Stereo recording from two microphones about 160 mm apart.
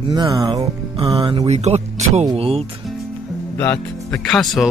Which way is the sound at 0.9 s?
35° right (ahead or behind).